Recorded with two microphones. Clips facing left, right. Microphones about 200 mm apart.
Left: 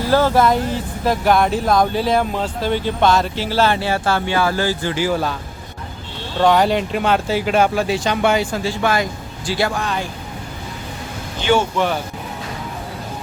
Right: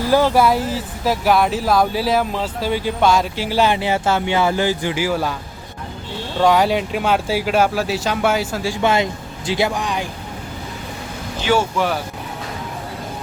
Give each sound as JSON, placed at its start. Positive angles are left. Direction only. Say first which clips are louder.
{"t": 0.1, "sound": "speech", "louder": "even", "side_deg": -10}
{"t": 6.4, "sound": "speech", "louder": "left 1 dB", "side_deg": -5}
{"t": 8.8, "sound": "speech", "louder": "right 4 dB", "side_deg": -25}
{"t": 11.3, "sound": "speech", "louder": "left 1 dB", "side_deg": -5}